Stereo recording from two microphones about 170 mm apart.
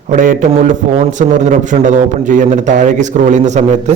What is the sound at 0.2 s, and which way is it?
A man's voice, 50° right (ahead or behind).